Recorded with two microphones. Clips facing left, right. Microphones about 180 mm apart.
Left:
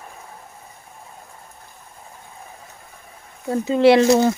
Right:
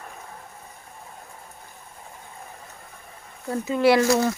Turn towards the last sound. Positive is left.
turn(degrees=25)  # may be behind; listen again after turning